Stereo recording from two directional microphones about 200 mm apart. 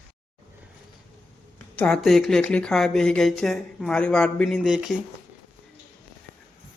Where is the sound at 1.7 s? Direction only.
5° left (ahead or behind).